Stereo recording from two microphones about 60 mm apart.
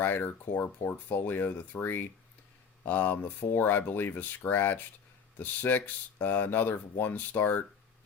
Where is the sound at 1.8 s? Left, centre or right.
Left.